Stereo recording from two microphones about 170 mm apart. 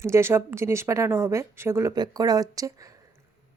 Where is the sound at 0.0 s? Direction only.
15° right (ahead or behind).